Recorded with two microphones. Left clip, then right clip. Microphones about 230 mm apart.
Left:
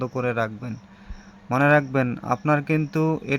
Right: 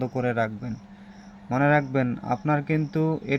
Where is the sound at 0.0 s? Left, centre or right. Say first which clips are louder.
Left 1 dB; centre.